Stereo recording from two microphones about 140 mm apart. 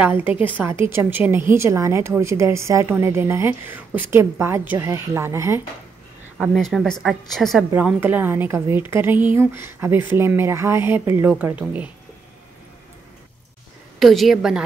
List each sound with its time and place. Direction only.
0.0 s a woman's voice: 10° right (ahead or behind)
6.5 s a woman's voice: centre (ahead or behind)
7.7 s a woman's voice: 10° right (ahead or behind)
13.9 s a woman's voice: centre (ahead or behind)